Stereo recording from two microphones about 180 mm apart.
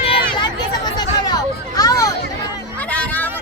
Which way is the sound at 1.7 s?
20° left (ahead or behind).